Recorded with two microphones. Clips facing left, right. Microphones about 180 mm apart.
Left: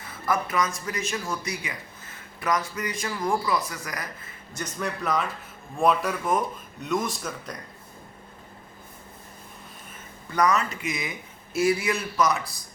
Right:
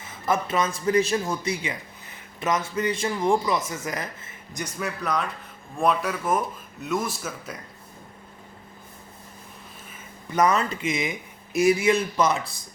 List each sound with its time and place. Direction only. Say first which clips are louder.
0.0 s speech: right 2 dB; 25° right (ahead or behind)
4.5 s speech: even; 5° right (ahead or behind)
10.3 s speech: right 2 dB; 25° right (ahead or behind)